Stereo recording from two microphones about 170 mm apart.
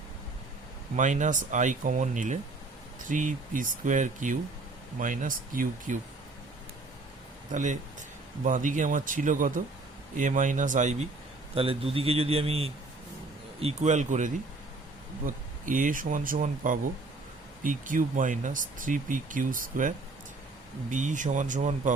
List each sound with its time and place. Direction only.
0.9 s speech: 45° right (ahead or behind)
7.5 s speech: 45° right (ahead or behind)
11.5 s a man's voice: 35° right (ahead or behind)
15.6 s speech: 50° right (ahead or behind)
20.9 s speech: 45° right (ahead or behind)